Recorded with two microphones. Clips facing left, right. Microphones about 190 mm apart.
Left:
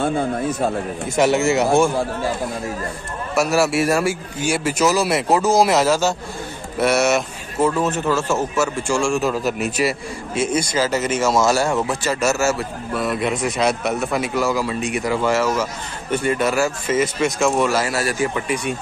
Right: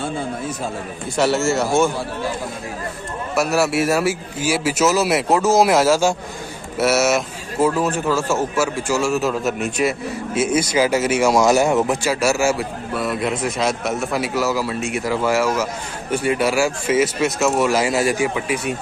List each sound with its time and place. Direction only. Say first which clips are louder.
0.0 s a man's voice: left 5 dB; 55° left (ahead or behind)
1.1 s speech: left 1 dB; 15° left (ahead or behind)
3.3 s a man's voice: left 1 dB; centre (ahead or behind)
12.9 s a man's voice: left 1 dB; centre (ahead or behind)
17.6 s a man's voice: right 3 dB; 15° right (ahead or behind)
18.3 s a man's voice: even; 5° right (ahead or behind)